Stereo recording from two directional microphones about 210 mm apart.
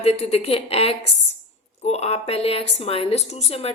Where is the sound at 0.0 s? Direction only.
30° left (ahead or behind).